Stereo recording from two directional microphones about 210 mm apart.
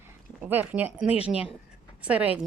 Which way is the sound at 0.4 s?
10° right (ahead or behind).